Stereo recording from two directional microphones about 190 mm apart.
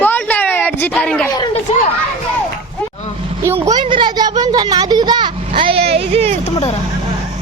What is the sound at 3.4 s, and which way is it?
Speech, 15° right (ahead or behind).